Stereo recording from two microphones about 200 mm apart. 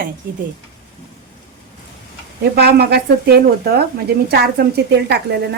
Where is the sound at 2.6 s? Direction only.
55° right (ahead or behind).